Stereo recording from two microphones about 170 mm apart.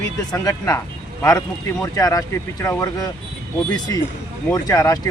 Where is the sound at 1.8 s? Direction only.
20° left (ahead or behind).